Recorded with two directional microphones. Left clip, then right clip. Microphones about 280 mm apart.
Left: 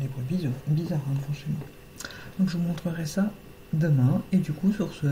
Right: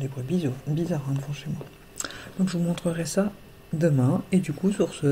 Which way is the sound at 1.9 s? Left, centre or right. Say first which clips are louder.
Right 3 dB; right.